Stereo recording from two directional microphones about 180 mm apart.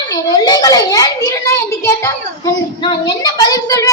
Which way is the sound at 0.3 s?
20° left (ahead or behind).